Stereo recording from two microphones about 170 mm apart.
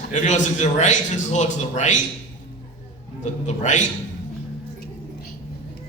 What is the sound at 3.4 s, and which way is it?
Speech, 45° left (ahead or behind).